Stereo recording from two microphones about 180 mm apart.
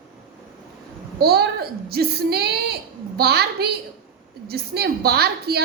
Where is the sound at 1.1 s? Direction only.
60° right (ahead or behind).